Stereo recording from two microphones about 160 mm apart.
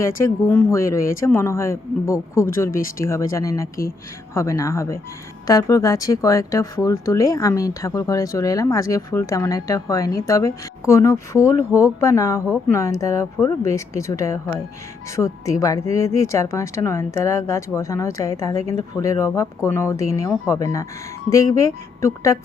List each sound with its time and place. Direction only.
0.0 s speech: 15° left (ahead or behind)